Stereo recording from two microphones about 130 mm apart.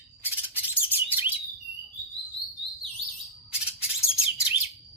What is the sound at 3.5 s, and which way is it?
Chirp, 10° right (ahead or behind).